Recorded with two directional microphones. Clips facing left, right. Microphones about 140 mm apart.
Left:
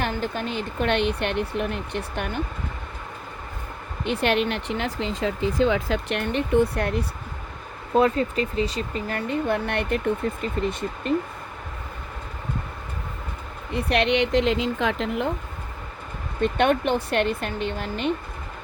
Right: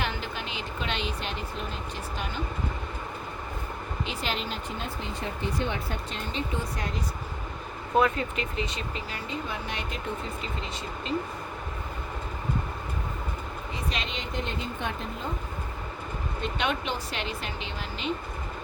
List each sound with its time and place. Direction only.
0.0 s speech: 50° left (ahead or behind)
4.0 s speech: 60° left (ahead or behind)
7.9 s speech: 35° left (ahead or behind)
9.0 s speech: 55° left (ahead or behind)
13.7 s speech: 65° left (ahead or behind); by 15.3 s 80° left
16.4 s speech: 55° left (ahead or behind)